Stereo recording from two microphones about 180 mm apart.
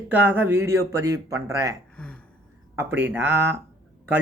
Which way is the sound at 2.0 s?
5° left (ahead or behind).